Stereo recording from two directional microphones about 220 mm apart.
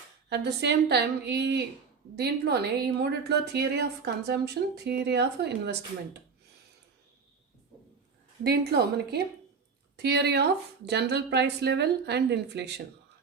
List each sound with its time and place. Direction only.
0.3 s speech: 50° right (ahead or behind)
8.4 s speech: 45° right (ahead or behind)